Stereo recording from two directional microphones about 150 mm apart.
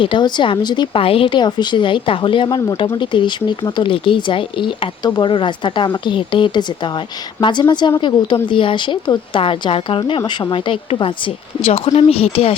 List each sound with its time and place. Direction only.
0.0 s speech: 30° left (ahead or behind)